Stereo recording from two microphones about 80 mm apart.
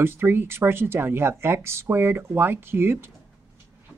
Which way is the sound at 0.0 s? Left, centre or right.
Right.